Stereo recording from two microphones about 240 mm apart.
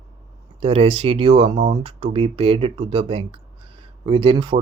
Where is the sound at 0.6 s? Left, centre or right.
Right.